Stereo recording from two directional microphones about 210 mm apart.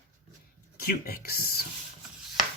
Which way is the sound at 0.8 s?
45° left (ahead or behind).